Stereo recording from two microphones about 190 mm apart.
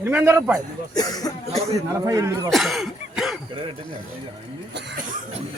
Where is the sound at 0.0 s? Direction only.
10° right (ahead or behind).